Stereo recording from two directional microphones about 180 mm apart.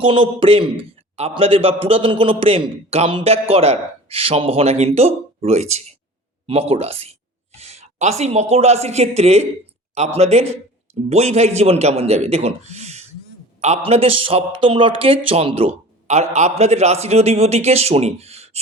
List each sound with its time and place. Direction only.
0.0 s a man's voice: 30° right (ahead or behind)